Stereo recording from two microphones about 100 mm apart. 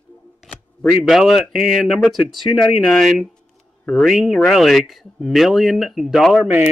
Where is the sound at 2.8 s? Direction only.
Centre (ahead or behind).